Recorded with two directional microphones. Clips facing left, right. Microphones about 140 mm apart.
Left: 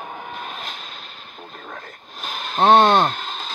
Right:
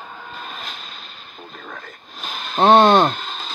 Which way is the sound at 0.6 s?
55° left (ahead or behind).